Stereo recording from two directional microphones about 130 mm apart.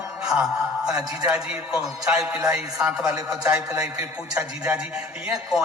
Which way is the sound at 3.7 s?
25° right (ahead or behind).